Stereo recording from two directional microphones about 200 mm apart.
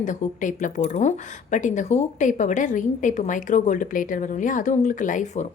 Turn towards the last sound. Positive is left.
turn(degrees=40)  # may be behind; listen again after turning